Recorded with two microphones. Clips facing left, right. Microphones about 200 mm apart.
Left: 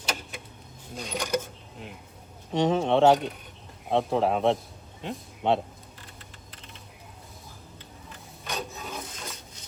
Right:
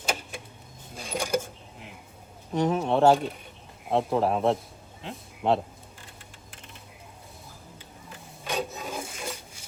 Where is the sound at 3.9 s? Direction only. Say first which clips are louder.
Even; centre (ahead or behind).